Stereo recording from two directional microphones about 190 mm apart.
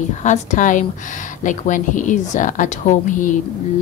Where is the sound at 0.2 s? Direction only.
40° left (ahead or behind).